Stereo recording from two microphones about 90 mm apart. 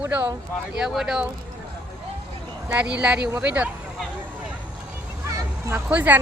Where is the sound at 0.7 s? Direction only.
5° right (ahead or behind).